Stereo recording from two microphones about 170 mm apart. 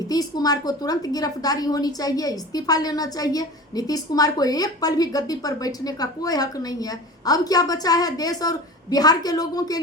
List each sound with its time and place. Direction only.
0.1 s a woman's voice: 20° left (ahead or behind)